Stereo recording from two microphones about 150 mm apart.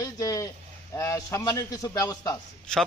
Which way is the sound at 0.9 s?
20° left (ahead or behind).